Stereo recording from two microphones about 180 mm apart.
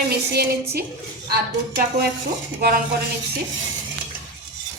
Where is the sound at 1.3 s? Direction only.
60° right (ahead or behind).